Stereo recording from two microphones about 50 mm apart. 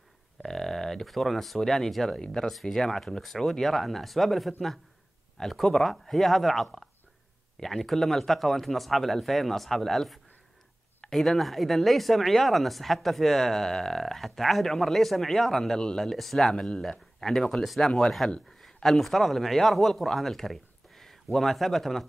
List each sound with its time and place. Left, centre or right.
0.4 s speech: centre